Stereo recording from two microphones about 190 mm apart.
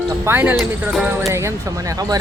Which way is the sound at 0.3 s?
10° right (ahead or behind).